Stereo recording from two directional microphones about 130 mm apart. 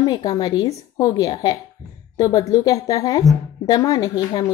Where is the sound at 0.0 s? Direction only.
30° left (ahead or behind).